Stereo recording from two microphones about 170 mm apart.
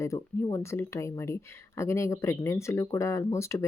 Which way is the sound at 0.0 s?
20° left (ahead or behind).